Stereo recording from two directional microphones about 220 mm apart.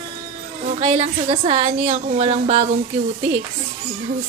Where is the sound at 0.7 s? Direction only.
30° right (ahead or behind).